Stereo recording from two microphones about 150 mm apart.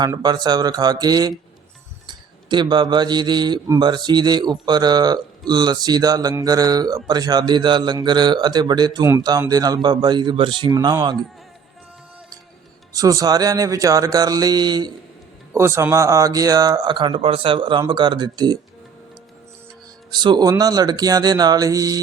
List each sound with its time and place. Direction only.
0.0 s speech: 25° right (ahead or behind)
12.9 s speech: 25° right (ahead or behind)
20.1 s speech: 30° right (ahead or behind)